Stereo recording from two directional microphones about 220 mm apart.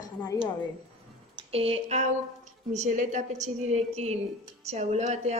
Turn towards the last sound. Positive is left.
turn(degrees=-30)  # may be behind; listen again after turning